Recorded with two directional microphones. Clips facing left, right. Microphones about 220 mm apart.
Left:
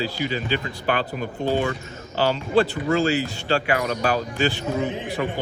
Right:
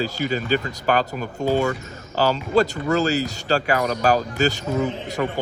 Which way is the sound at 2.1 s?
40° right (ahead or behind).